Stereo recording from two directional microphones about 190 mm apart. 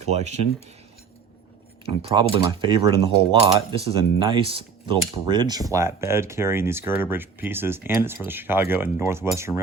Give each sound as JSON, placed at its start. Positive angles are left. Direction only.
{"t": 0.1, "sound": "speech", "side_deg": -35}
{"t": 1.9, "sound": "speech", "side_deg": -30}